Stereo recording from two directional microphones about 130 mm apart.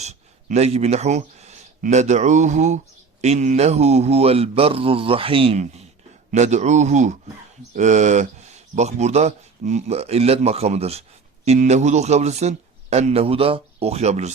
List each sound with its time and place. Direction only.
0.0 s speech: 60° right (ahead or behind)
6.3 s speech: 65° right (ahead or behind)